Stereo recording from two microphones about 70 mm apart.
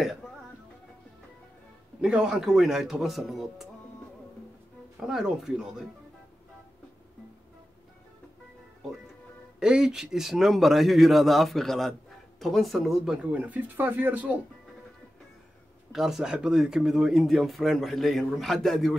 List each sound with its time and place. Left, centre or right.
0.0 s music: centre
2.0 s speech: centre
5.0 s speech: centre
9.6 s speech: centre
13.2 s speech: centre
15.9 s speech: centre